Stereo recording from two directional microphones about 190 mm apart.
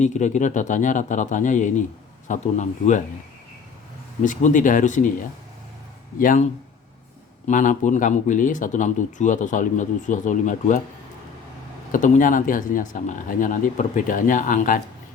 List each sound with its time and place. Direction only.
0.0 s speech: 40° left (ahead or behind)
4.2 s speech: 40° left (ahead or behind)
6.1 s speech: 45° left (ahead or behind)
11.9 s speech: 40° left (ahead or behind)